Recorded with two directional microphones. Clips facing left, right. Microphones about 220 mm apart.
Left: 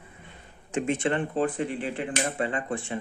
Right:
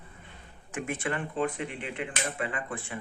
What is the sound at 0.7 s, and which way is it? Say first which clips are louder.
Speech: left 7 dB; 25° left (ahead or behind).